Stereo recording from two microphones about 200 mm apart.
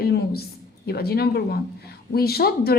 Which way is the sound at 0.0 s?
50° left (ahead or behind).